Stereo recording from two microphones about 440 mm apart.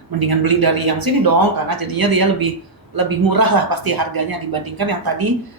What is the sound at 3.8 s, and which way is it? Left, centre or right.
A woman's voice, right.